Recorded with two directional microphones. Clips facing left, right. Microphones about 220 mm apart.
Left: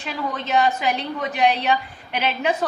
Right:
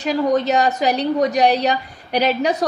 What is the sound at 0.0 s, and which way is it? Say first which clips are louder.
A woman's voice: right 11 dB; 40° right (ahead or behind).